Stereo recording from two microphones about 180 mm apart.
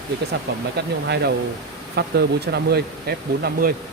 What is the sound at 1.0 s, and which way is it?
Speech, 65° right (ahead or behind).